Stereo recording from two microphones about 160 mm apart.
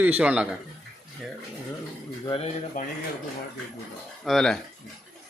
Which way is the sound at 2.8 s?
55° left (ahead or behind).